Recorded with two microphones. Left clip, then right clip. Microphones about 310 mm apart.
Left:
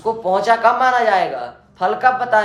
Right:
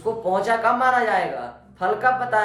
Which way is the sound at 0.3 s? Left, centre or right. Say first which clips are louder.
Left 6 dB; left.